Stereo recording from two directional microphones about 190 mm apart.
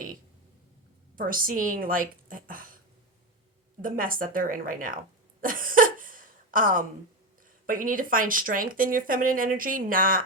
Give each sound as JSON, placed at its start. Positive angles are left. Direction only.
{"t": 1.1, "sound": "speech", "side_deg": -45}
{"t": 5.4, "sound": "a sound", "side_deg": -45}
{"t": 7.7, "sound": "speech", "side_deg": -45}